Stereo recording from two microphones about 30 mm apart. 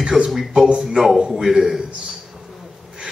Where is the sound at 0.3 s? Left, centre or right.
Centre.